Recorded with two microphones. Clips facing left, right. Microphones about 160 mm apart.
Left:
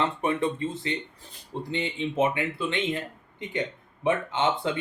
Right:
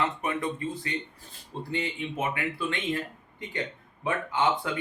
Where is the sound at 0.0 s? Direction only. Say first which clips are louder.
Left 3 dB; 30° left (ahead or behind).